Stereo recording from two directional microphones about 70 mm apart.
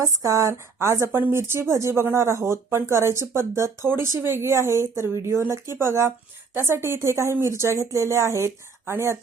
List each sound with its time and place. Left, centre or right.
0.0 s speech: right